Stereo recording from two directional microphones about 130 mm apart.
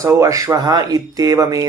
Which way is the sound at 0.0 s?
25° right (ahead or behind).